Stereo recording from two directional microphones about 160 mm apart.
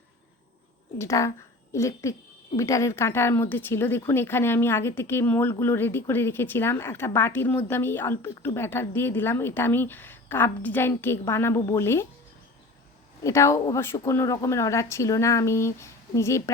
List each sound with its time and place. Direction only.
0.9 s a woman's voice: 20° left (ahead or behind)
13.2 s a woman's voice: 20° left (ahead or behind)